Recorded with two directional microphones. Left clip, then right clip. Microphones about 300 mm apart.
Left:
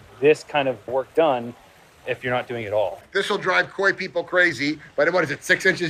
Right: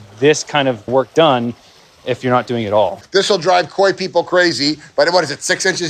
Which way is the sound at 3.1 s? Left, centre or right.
Centre.